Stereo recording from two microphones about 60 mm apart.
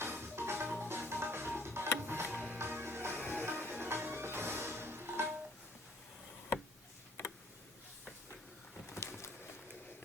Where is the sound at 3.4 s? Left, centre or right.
Right.